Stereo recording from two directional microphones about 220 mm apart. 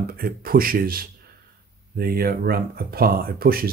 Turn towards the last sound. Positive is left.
turn(degrees=-40)  # may be behind; listen again after turning